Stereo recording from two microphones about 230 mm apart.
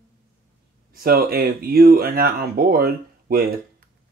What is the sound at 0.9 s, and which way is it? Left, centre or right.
Speech, right.